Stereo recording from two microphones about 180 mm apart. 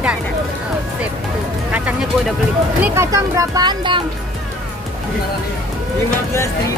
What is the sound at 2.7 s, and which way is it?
Speech, 10° right (ahead or behind).